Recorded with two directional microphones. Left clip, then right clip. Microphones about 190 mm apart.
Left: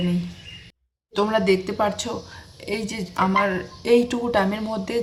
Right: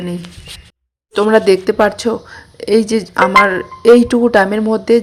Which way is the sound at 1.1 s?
50° right (ahead or behind).